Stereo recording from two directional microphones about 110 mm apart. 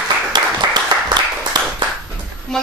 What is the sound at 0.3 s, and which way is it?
Applause, 40° right (ahead or behind).